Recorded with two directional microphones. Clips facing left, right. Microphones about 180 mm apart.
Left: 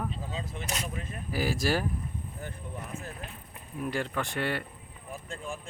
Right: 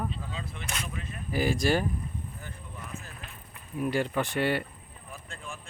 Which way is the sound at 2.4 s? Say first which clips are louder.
Left 4 dB; 50° left (ahead or behind).